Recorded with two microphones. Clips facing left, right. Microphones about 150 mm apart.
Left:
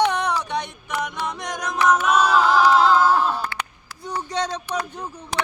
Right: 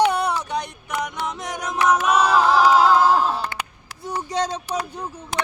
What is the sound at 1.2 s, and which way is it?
Music, 5° right (ahead or behind).